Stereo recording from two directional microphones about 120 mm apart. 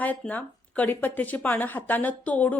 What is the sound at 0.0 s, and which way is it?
Speech, 15° left (ahead or behind).